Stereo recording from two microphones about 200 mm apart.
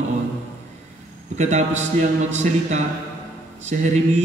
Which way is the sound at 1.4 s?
35° right (ahead or behind).